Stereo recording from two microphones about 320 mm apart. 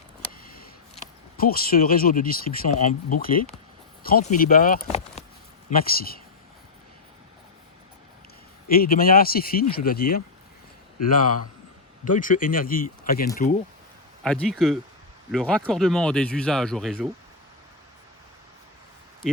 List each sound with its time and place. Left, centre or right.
1.4 s speech: left
8.7 s speech: left
12.0 s speech: left
14.3 s speech: centre